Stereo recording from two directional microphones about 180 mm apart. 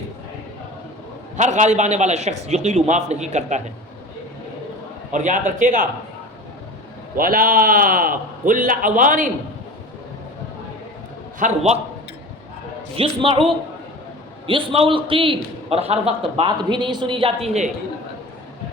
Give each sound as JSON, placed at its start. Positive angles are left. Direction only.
{"t": 1.4, "sound": "a man's voice", "side_deg": -40}
{"t": 5.1, "sound": "a man's voice", "side_deg": -45}
{"t": 7.2, "sound": "a man's voice", "side_deg": -50}
{"t": 11.3, "sound": "a man's voice", "side_deg": -40}
{"t": 13.0, "sound": "a man's voice", "side_deg": -30}